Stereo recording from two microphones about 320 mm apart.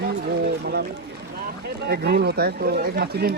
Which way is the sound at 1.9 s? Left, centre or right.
Right.